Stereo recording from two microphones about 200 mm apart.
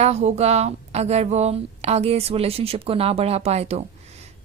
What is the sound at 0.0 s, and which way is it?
A woman's voice, 35° right (ahead or behind).